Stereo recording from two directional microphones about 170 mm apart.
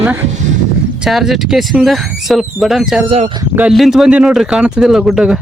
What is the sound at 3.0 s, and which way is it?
Speech, 35° right (ahead or behind).